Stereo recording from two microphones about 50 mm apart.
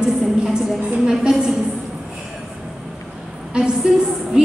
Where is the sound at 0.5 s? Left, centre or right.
Centre.